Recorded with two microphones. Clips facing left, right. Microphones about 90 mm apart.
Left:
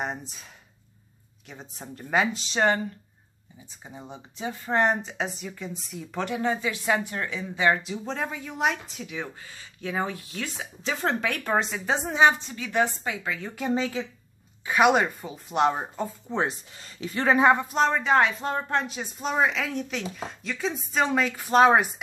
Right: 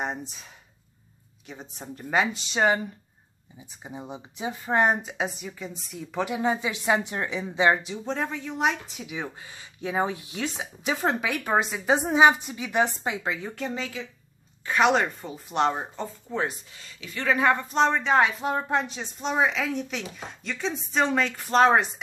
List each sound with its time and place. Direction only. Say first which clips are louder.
0.0 s speech: right 1 dB; centre (ahead or behind)
1.5 s speech: right 2 dB; centre (ahead or behind); by 7.8 s 20° right (ahead or behind)
7.8 s speech: right 1 dB; centre (ahead or behind); by 13.4 s 25° right (ahead or behind)
13.7 s speech: left 6 dB; 35° left (ahead or behind)
14.7 s speech: left 1 dB; 10° left (ahead or behind)
16.3 s speech: even; 25° left (ahead or behind)
17.4 s speech: left 3 dB; 20° left (ahead or behind)
17.6 s speech: even; centre (ahead or behind)
18.9 s speech: even; 5° left (ahead or behind)